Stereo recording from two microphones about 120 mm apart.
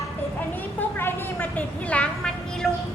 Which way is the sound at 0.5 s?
20° left (ahead or behind).